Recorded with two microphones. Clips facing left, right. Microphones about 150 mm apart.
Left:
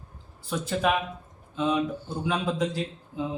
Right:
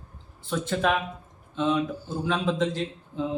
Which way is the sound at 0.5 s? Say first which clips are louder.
Right 1 dB; 5° left (ahead or behind).